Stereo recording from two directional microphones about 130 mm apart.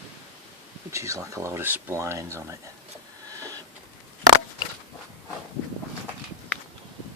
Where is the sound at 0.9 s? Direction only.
25° right (ahead or behind).